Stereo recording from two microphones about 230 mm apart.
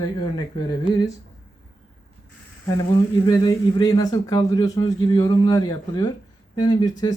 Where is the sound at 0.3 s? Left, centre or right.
Centre.